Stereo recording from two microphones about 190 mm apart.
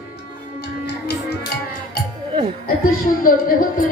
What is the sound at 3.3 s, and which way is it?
Speech, 50° left (ahead or behind).